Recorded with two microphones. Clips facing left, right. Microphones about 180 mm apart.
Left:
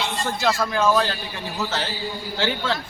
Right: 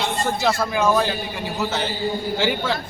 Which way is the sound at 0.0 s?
50° right (ahead or behind).